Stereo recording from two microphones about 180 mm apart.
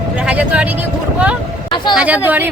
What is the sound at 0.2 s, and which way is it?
Speech, 5° right (ahead or behind).